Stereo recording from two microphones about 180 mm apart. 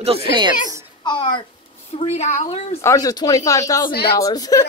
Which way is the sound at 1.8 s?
35° left (ahead or behind).